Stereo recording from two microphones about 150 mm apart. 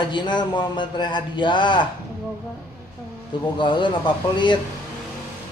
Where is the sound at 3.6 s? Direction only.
30° left (ahead or behind).